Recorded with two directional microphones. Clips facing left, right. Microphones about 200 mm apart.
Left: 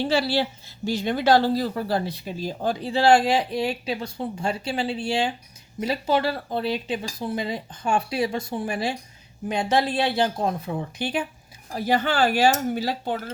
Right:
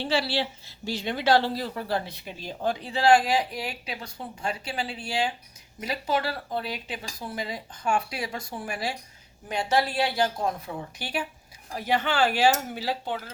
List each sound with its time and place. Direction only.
0.0 s a woman's voice: 45° left (ahead or behind); by 11.3 s 20° left (ahead or behind)
11.7 s a woman's voice: 35° left (ahead or behind)